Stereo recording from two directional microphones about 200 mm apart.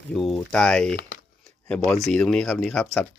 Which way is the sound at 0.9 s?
50° left (ahead or behind).